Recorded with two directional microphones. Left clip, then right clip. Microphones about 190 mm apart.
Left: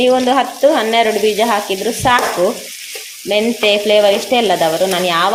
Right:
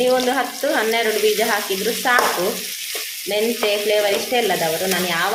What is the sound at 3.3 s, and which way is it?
Frying, 35° left (ahead or behind).